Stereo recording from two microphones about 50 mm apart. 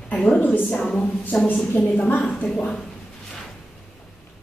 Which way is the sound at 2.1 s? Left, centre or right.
Left.